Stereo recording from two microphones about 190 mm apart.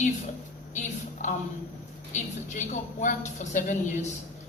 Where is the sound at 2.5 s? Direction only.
40° left (ahead or behind).